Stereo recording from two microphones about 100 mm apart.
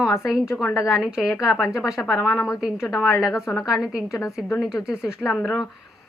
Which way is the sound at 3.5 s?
25° left (ahead or behind).